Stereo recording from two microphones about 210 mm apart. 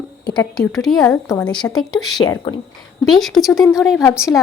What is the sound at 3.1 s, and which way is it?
Speech, centre (ahead or behind).